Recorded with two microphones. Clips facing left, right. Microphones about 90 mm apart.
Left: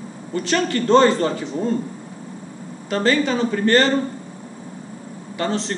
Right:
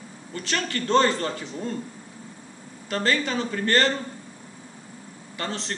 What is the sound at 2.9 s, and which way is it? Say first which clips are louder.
A man's voice: left 6 dB; 10° left (ahead or behind).